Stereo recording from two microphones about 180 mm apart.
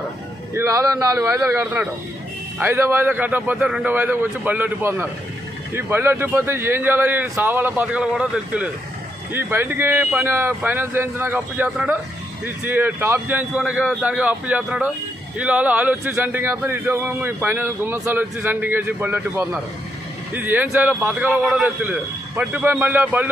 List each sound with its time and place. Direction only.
0.6 s speech: 15° right (ahead or behind)